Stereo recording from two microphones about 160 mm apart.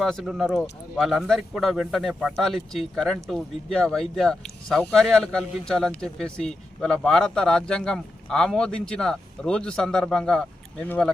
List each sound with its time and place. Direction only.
0.0 s speech: centre (ahead or behind)